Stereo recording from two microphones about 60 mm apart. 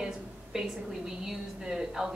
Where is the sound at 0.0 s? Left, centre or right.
Centre.